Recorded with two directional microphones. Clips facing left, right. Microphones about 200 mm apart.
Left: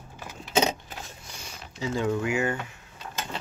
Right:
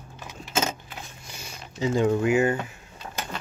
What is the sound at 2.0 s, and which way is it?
Speech, 35° right (ahead or behind).